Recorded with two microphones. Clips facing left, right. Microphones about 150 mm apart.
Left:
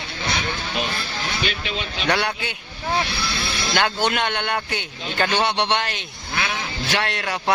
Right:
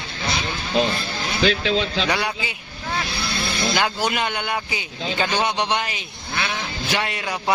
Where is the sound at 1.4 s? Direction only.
90° right.